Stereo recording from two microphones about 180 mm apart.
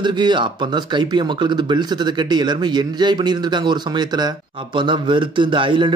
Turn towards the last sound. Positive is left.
turn(degrees=-30)  # may be behind; listen again after turning